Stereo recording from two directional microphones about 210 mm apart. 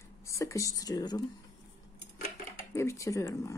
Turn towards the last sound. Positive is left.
turn(degrees=15)  # may be behind; listen again after turning